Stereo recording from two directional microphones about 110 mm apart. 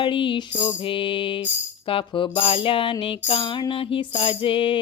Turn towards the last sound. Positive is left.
turn(degrees=55)  # may be behind; listen again after turning